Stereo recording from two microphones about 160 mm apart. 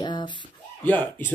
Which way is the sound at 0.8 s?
10° left (ahead or behind).